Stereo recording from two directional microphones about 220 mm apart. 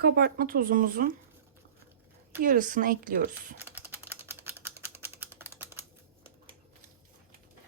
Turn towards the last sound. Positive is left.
turn(degrees=-10)  # may be behind; listen again after turning